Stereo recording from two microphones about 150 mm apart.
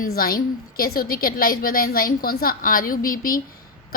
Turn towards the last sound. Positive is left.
turn(degrees=70)  # may be behind; listen again after turning